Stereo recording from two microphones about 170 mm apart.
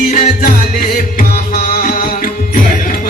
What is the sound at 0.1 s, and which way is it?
Music, 55° left (ahead or behind).